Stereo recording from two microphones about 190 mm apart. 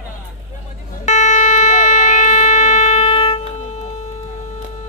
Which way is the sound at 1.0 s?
40° left (ahead or behind).